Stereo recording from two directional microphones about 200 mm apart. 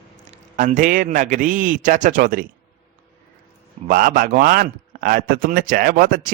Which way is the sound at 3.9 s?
45° right (ahead or behind).